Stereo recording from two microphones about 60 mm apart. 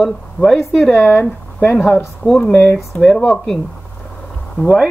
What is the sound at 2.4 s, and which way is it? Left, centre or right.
Speech, left.